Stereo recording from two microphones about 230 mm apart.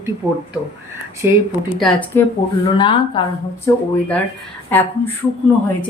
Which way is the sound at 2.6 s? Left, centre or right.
Left.